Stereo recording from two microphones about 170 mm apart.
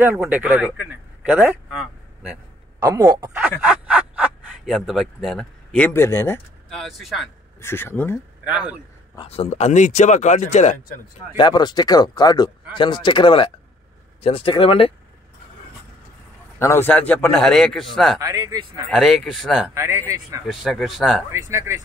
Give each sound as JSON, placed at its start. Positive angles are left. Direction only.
{"t": 0.0, "sound": "a man's voice", "side_deg": -10}
{"t": 2.8, "sound": "speech", "side_deg": -25}
{"t": 3.3, "sound": "speech", "side_deg": -10}
{"t": 6.7, "sound": "a man's voice", "side_deg": 0}
{"t": 7.6, "sound": "speech", "side_deg": 15}
{"t": 8.5, "sound": "speech", "side_deg": -5}
{"t": 9.1, "sound": "speech", "side_deg": 30}
{"t": 11.3, "sound": "speech", "side_deg": 25}
{"t": 16.5, "sound": "a man's voice", "side_deg": 15}
{"t": 18.2, "sound": "speech", "side_deg": -20}
{"t": 18.9, "sound": "a man's voice", "side_deg": 0}
{"t": 19.7, "sound": "speech", "side_deg": -15}
{"t": 20.4, "sound": "a man's voice", "side_deg": 0}
{"t": 21.3, "sound": "speech", "side_deg": -15}